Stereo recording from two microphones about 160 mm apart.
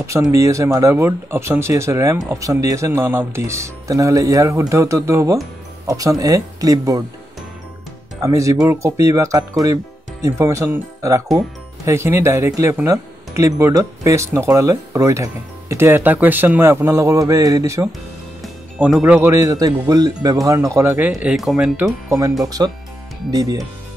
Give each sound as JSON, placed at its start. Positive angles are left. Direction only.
{"t": 0.0, "sound": "speech", "side_deg": -20}
{"t": 8.2, "sound": "speech", "side_deg": -20}
{"t": 18.4, "sound": "speech", "side_deg": -5}
{"t": 21.1, "sound": "speech", "side_deg": -5}
{"t": 22.4, "sound": "speech", "side_deg": -20}